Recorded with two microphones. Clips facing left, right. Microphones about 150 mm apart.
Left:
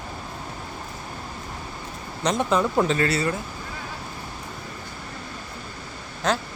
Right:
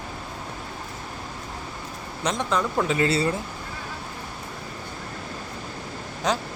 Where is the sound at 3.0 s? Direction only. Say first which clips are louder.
Right 1 dB; 25° right (ahead or behind).